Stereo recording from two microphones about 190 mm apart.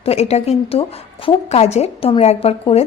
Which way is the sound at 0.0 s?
35° left (ahead or behind).